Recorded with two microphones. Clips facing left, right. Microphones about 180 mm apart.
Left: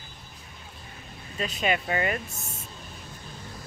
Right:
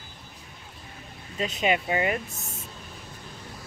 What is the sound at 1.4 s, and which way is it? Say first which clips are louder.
Speech: right 2 dB; 20° right (ahead or behind).